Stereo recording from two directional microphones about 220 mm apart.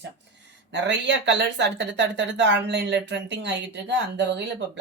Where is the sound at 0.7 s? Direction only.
55° right (ahead or behind).